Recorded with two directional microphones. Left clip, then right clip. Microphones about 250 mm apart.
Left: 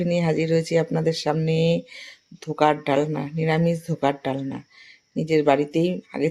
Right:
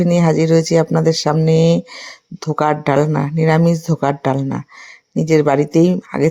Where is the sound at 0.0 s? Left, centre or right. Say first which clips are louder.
Right 8 dB; right.